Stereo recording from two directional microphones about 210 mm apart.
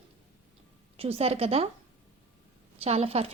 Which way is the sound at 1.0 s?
30° right (ahead or behind).